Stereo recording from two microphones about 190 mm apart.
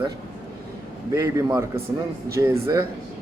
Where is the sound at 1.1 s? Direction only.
15° right (ahead or behind).